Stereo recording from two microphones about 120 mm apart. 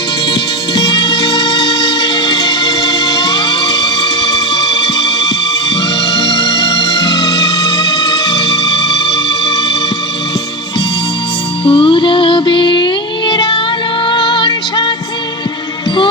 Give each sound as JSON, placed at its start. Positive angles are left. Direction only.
{"t": 0.8, "sound": "music", "side_deg": 35}
{"t": 6.1, "sound": "music", "side_deg": 30}
{"t": 11.6, "sound": "music", "side_deg": 45}